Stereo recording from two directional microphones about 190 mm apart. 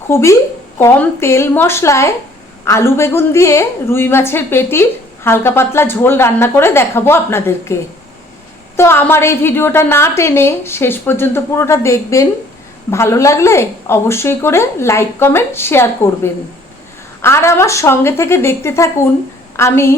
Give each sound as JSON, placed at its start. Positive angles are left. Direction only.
{"t": 0.1, "sound": "a woman's voice", "side_deg": 15}